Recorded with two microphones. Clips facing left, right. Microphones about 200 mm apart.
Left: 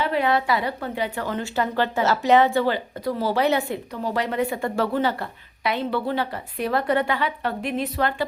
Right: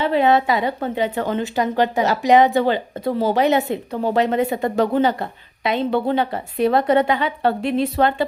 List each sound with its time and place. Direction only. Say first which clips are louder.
0.0 s a woman's voice: right 5 dB; 25° right (ahead or behind)